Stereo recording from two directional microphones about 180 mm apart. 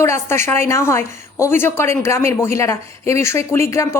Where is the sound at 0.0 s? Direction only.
15° left (ahead or behind).